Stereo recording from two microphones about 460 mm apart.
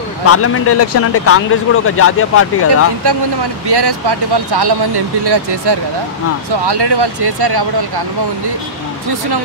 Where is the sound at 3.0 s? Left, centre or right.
Right.